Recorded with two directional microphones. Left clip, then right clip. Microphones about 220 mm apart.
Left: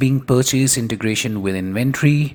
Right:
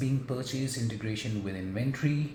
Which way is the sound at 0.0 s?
45° left (ahead or behind).